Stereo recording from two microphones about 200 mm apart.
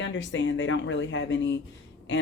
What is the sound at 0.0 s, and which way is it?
Speech, 70° left (ahead or behind).